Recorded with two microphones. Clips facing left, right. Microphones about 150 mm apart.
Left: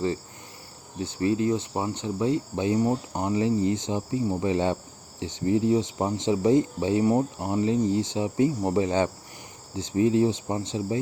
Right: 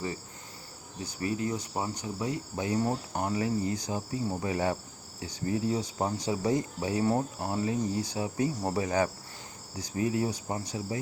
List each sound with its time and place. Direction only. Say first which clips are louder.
1.0 s speech: left 8 dB; 25° left (ahead or behind)